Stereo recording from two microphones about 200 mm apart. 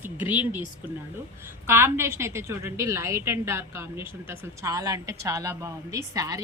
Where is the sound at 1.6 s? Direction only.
10° right (ahead or behind).